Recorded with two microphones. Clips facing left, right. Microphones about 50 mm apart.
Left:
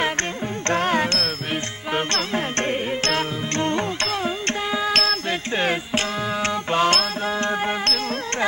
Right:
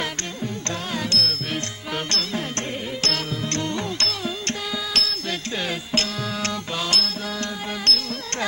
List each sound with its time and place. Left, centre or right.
0.7 s music: left
5.9 s music: left
6.7 s music: left